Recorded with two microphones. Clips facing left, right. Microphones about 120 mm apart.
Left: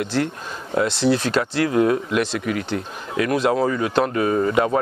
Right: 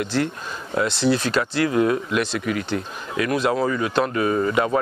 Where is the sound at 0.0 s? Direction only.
50° left (ahead or behind).